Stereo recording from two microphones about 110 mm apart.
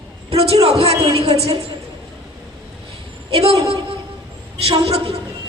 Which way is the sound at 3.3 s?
60° right (ahead or behind).